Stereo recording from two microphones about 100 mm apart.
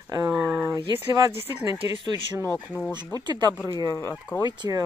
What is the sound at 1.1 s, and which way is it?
Speech, 35° right (ahead or behind).